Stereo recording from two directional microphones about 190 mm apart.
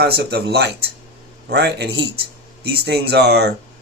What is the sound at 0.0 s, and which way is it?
Speech, 60° right (ahead or behind).